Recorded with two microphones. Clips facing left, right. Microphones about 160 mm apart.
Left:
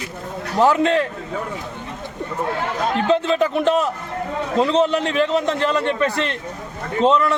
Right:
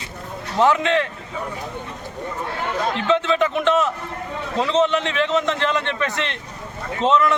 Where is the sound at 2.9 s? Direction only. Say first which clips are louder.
Left 2 dB; 40° left (ahead or behind).